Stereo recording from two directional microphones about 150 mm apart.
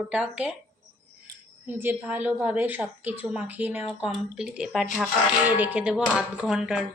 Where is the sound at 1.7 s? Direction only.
10° right (ahead or behind).